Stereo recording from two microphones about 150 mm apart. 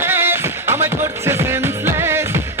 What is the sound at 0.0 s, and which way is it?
Music, 15° right (ahead or behind).